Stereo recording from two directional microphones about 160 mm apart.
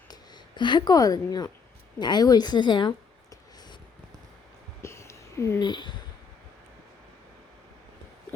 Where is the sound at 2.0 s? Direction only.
25° left (ahead or behind).